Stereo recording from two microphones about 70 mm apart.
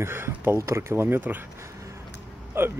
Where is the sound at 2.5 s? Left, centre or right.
Right.